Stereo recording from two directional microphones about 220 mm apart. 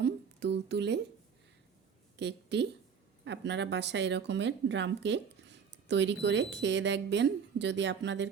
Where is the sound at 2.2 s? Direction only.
50° right (ahead or behind).